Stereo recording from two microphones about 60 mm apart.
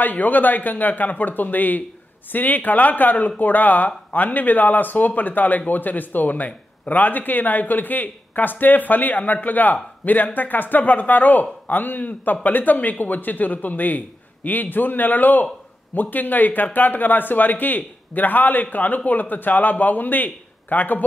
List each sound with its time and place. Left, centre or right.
0.0 s speech: left